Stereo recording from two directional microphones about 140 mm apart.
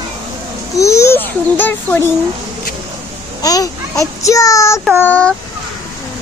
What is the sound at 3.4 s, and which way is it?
A child's voice, 25° left (ahead or behind).